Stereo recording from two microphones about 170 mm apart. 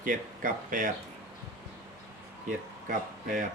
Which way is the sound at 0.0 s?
50° right (ahead or behind).